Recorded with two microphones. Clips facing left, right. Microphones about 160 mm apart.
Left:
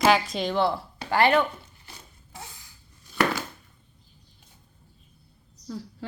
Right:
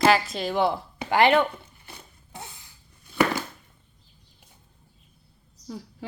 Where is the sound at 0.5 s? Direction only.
15° right (ahead or behind).